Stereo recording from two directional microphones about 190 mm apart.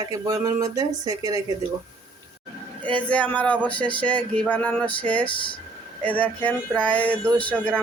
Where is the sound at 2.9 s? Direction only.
5° left (ahead or behind).